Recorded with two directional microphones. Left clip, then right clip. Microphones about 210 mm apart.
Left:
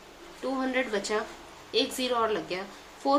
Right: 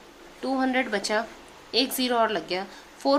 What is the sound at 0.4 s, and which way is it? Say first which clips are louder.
A woman's voice: right 4 dB; 40° right (ahead or behind).